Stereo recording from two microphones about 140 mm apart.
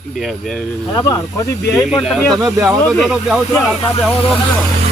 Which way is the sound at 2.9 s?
Centre (ahead or behind).